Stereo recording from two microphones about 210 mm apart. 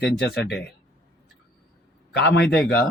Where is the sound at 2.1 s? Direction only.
55° left (ahead or behind).